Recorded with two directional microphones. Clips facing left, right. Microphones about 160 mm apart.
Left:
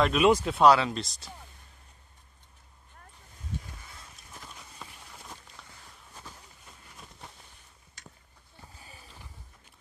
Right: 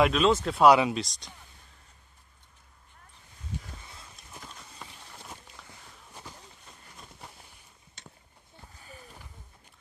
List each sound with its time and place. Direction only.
0.1 s speech: 10° left (ahead or behind)
0.7 s speech: 15° right (ahead or behind)
0.9 s speech: centre (ahead or behind)
4.4 s clip-clop: centre (ahead or behind)
5.7 s walk: 15° right (ahead or behind)
7.0 s a sound: 5° right (ahead or behind)
8.0 s a sound: 25° right (ahead or behind)